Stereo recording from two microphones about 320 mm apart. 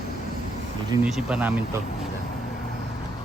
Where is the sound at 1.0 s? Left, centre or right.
Centre.